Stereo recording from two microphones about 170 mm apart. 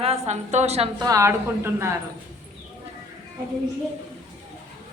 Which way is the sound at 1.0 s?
20° right (ahead or behind).